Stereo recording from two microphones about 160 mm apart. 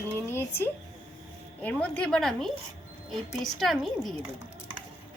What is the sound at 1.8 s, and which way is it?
Speech, 10° left (ahead or behind).